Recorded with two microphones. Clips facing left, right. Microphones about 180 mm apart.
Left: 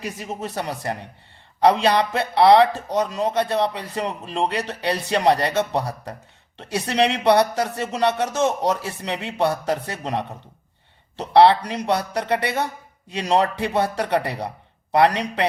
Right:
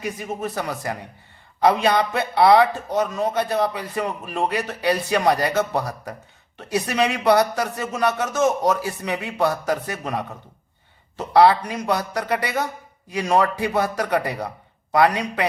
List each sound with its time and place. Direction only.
0.3 s a man's voice: 30° left (ahead or behind)